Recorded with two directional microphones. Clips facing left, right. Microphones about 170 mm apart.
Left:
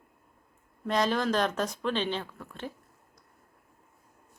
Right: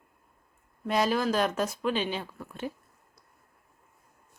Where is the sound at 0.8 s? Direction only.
5° right (ahead or behind).